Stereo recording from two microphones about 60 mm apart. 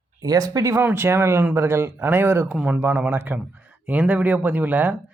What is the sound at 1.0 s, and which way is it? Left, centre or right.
Speech, right.